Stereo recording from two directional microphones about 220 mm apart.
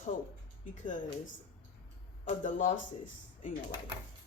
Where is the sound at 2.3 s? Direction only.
35° left (ahead or behind).